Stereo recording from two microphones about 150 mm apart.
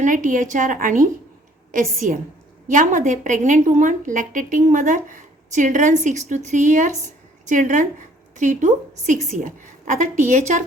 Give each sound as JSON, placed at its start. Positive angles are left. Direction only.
{"t": 0.0, "sound": "a woman's voice", "side_deg": -60}